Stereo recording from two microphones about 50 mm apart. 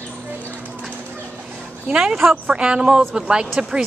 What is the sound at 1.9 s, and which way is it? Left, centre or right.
A woman's voice, centre.